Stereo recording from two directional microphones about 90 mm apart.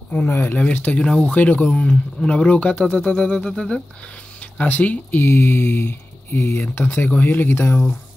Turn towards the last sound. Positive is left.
turn(degrees=25)  # may be behind; listen again after turning